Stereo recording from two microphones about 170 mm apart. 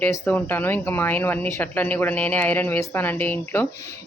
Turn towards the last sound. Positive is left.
turn(degrees=10)  # may be behind; listen again after turning